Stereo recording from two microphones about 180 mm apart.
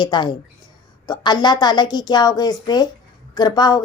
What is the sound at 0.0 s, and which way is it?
A woman's voice, 25° left (ahead or behind).